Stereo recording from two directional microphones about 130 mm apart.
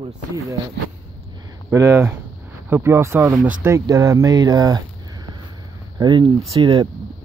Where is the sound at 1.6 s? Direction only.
20° right (ahead or behind).